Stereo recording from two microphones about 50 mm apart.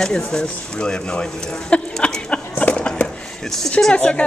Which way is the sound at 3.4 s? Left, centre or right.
Centre.